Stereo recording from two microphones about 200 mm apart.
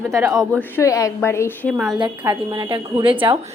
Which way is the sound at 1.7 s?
Centre (ahead or behind).